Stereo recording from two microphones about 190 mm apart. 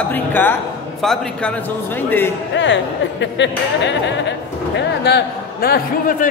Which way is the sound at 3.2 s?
70° left (ahead or behind).